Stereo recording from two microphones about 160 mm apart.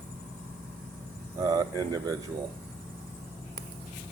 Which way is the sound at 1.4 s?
20° right (ahead or behind).